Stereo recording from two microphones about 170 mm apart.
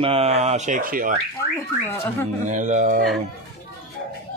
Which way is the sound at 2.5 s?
45° right (ahead or behind).